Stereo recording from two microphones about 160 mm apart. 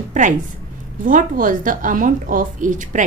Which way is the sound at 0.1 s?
50° right (ahead or behind).